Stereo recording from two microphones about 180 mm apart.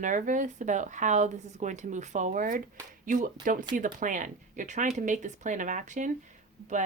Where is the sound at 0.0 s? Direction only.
45° right (ahead or behind).